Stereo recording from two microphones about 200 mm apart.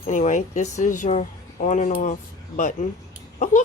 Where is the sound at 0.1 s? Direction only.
40° left (ahead or behind).